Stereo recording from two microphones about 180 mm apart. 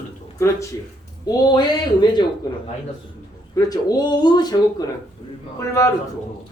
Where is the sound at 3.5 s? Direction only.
20° left (ahead or behind).